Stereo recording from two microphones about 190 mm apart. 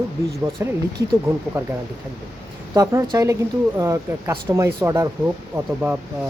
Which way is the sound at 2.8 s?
15° right (ahead or behind).